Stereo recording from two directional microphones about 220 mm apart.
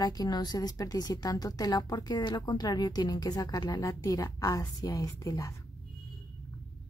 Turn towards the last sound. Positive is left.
turn(degrees=15)  # may be behind; listen again after turning